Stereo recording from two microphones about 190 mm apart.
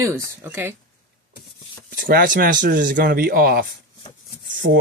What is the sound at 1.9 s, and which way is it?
Speech, 50° right (ahead or behind).